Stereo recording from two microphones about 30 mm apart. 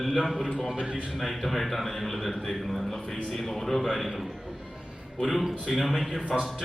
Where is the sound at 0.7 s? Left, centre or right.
Right.